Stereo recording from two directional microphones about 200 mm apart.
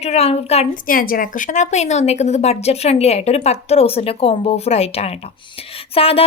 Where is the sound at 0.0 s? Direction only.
30° left (ahead or behind).